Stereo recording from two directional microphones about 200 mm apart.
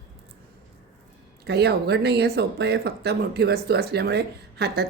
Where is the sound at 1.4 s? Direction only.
55° right (ahead or behind).